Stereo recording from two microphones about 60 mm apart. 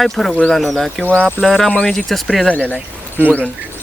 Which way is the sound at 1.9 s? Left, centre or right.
Centre.